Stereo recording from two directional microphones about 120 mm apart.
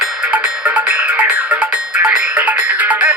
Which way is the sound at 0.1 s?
10° right (ahead or behind).